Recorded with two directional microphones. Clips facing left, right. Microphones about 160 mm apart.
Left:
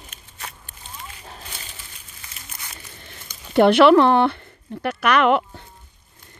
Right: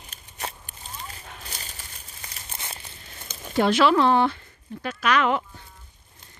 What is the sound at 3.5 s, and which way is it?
Speech, 60° left (ahead or behind).